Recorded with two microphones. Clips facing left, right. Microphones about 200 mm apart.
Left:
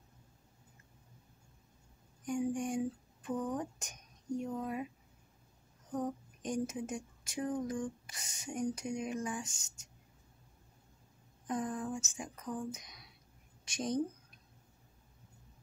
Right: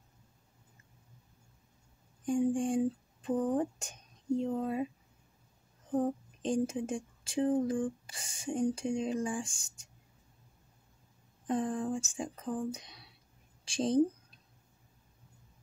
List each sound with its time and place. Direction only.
2.2 s speech: 30° right (ahead or behind)
5.9 s speech: 30° right (ahead or behind)
11.4 s speech: 30° right (ahead or behind)